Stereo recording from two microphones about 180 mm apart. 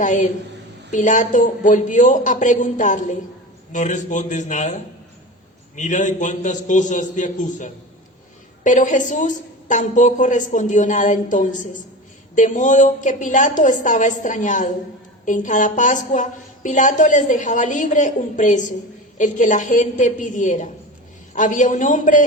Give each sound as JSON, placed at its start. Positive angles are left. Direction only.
{"t": 0.0, "sound": "a woman's voice", "side_deg": 45}